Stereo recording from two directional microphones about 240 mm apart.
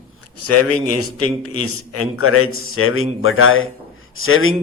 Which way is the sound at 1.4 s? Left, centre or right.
Left.